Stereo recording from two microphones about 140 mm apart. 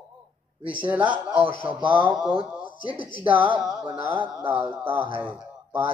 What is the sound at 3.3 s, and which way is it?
Speech, 10° right (ahead or behind).